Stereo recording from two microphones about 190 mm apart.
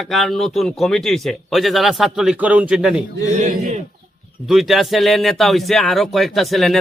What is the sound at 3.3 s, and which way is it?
Speech, 40° right (ahead or behind).